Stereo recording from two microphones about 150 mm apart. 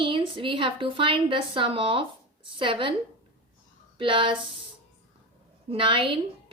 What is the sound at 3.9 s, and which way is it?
Speech, 35° right (ahead or behind).